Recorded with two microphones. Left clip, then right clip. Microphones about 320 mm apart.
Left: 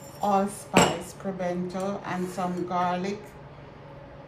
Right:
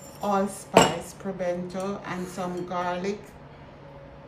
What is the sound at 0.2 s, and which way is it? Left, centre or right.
A woman's voice, centre.